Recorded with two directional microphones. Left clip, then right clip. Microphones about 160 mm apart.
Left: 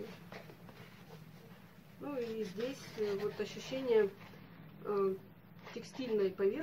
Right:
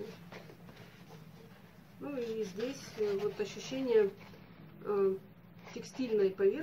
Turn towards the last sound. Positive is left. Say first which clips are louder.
# right 4 dB
turn(degrees=-5)  # may be behind; listen again after turning